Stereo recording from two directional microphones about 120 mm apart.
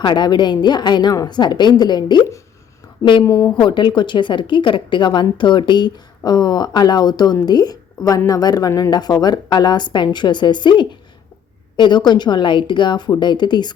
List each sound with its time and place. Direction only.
0.0 s a woman's voice: 40° left (ahead or behind)
3.2 s a woman's voice: 25° left (ahead or behind)
3.6 s a woman's voice: 40° left (ahead or behind)